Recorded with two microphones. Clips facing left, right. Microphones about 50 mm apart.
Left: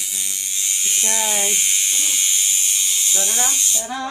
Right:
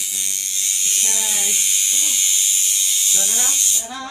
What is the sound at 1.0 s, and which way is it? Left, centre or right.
Speech, left.